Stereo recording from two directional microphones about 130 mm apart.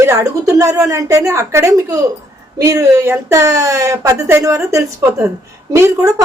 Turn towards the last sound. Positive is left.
turn(degrees=-20)  # may be behind; listen again after turning